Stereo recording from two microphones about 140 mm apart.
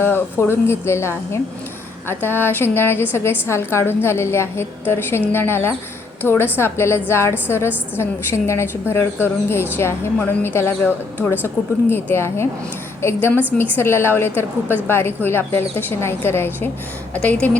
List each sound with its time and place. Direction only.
0.0 s a woman's voice: 15° left (ahead or behind)